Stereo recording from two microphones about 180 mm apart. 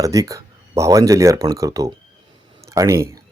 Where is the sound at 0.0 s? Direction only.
20° right (ahead or behind).